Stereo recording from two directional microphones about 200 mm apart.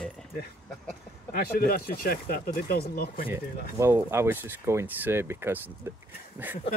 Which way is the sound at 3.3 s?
10° right (ahead or behind).